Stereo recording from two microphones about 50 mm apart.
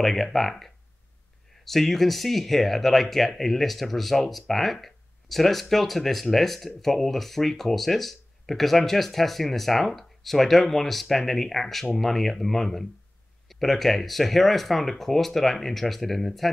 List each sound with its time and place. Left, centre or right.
0.0 s speech: centre